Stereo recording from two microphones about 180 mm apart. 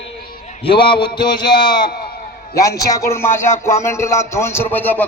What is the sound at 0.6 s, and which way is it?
A man's voice, 30° left (ahead or behind).